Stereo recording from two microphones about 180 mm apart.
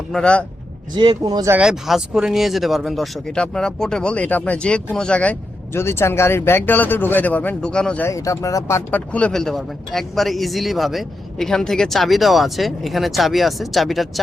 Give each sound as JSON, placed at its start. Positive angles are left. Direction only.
{"t": 0.1, "sound": "speech", "side_deg": 5}
{"t": 0.9, "sound": "speech", "side_deg": -20}
{"t": 1.5, "sound": "speech", "side_deg": -5}